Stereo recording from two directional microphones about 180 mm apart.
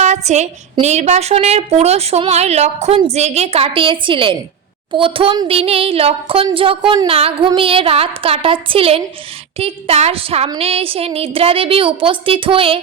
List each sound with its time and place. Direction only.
0.0 s a woman's voice: 40° right (ahead or behind)